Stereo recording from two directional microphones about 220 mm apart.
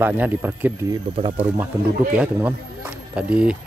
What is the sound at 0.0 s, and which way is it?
Speech, 10° right (ahead or behind).